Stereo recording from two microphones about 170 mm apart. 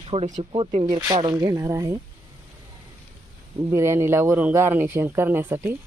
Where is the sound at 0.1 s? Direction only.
40° right (ahead or behind).